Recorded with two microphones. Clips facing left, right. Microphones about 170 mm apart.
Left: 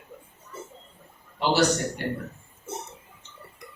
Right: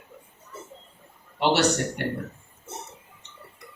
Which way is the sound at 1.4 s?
70° right (ahead or behind).